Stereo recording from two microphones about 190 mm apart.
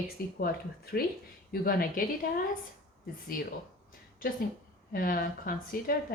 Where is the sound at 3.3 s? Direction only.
50° left (ahead or behind).